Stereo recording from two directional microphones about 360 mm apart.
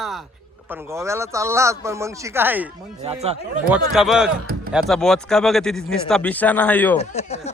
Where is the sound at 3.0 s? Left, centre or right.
Centre.